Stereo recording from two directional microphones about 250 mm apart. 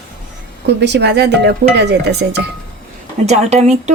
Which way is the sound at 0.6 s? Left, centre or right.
Right.